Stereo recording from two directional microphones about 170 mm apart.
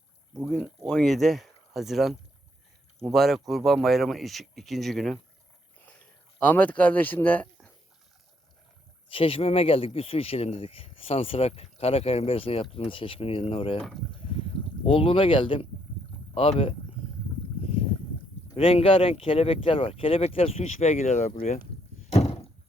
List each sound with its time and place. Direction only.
0.5 s speech: 5° left (ahead or behind)
5.8 s a sound: 10° left (ahead or behind)
9.0 s speech: 30° left (ahead or behind)
14.8 s speech: 30° left (ahead or behind)
18.5 s speech: 35° left (ahead or behind)
22.1 s a sound: 40° left (ahead or behind)